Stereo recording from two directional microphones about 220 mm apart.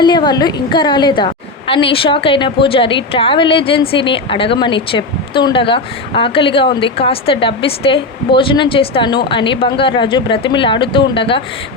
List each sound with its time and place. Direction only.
0.0 s a woman's voice: 20° left (ahead or behind)